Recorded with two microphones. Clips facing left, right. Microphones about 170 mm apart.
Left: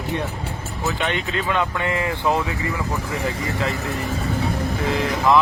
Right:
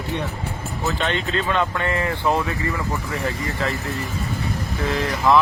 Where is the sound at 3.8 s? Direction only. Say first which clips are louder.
Left 2 dB; 65° left (ahead or behind).